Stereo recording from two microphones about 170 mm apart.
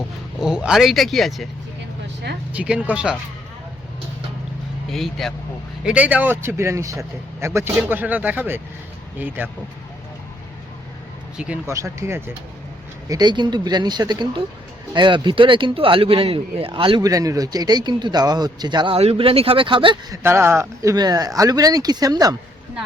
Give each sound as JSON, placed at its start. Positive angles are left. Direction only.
{"t": 0.3, "sound": "speech", "side_deg": -5}
{"t": 2.5, "sound": "speech", "side_deg": -5}
{"t": 4.9, "sound": "speech", "side_deg": 0}
{"t": 11.3, "sound": "speech", "side_deg": -10}
{"t": 20.2, "sound": "speech", "side_deg": -15}